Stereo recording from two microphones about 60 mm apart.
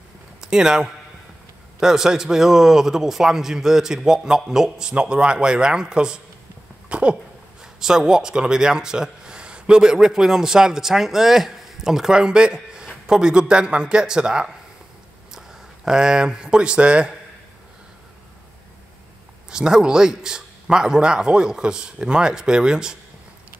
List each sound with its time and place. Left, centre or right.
0.4 s a man's voice: centre
6.9 s a sound: centre
7.6 s a man's voice: centre
19.5 s a man's voice: centre